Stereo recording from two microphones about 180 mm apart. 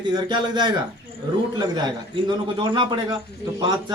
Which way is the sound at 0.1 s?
25° right (ahead or behind).